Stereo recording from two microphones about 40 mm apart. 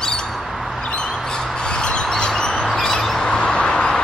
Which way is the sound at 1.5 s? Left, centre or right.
Left.